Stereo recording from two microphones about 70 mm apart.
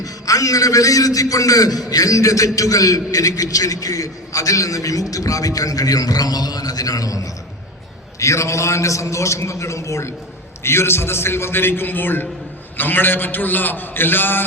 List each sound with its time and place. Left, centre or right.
0.0 s a man's voice: left
8.2 s a man's voice: left